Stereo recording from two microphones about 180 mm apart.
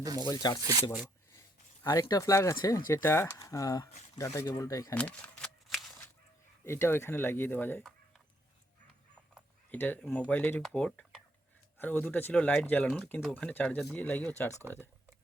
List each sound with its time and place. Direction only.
0.0 s speech: 20° right (ahead or behind)
0.3 s speech: 20° left (ahead or behind)
0.6 s speech: 20° right (ahead or behind)
1.3 s speech: 15° left (ahead or behind)
4.9 s shuffling cards: 5° left (ahead or behind)
6.7 s speech: 15° left (ahead or behind)
9.6 s speech: 10° left (ahead or behind)